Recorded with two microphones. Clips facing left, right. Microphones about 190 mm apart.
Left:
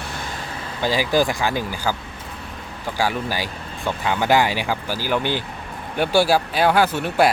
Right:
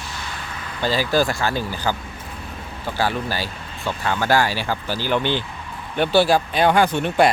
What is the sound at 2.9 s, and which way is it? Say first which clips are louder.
Speech: even; 10° left (ahead or behind).